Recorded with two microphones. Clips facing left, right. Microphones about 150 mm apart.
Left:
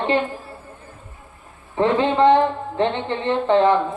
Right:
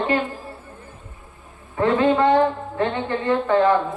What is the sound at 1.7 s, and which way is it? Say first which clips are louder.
A woman's voice: even; 25° left (ahead or behind).